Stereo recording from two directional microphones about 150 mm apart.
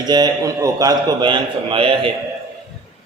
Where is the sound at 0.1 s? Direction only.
25° right (ahead or behind).